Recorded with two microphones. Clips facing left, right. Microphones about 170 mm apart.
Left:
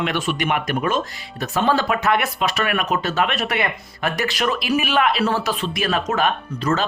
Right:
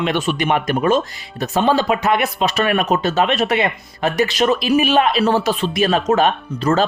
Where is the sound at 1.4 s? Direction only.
20° right (ahead or behind).